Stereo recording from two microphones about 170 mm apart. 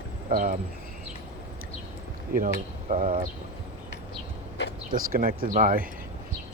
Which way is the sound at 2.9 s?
50° right (ahead or behind).